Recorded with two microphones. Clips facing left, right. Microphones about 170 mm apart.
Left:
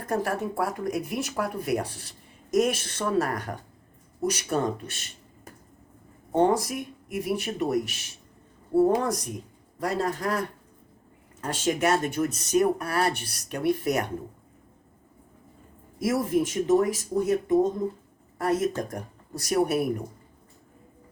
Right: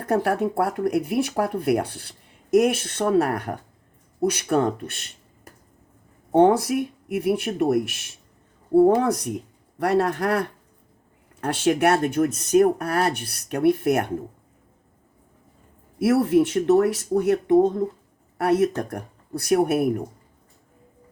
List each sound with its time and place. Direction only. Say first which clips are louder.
0.0 s speech: right 6 dB; 60° right (ahead or behind)
6.3 s a man's voice: right 6 dB; 60° right (ahead or behind)
16.0 s speech: right 6 dB; 60° right (ahead or behind)